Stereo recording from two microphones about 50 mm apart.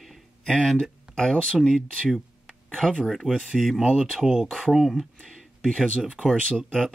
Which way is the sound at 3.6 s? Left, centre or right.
Centre.